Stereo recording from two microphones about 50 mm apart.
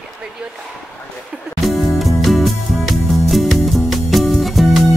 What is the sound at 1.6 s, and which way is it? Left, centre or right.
Music, centre.